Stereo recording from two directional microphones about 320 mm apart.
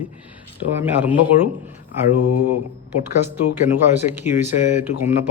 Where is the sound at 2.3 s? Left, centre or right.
Left.